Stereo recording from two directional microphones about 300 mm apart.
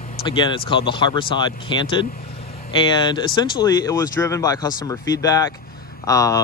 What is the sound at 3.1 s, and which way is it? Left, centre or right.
Speech, centre.